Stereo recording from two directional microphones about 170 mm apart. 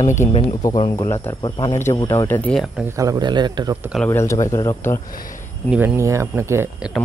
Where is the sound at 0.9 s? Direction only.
15° left (ahead or behind).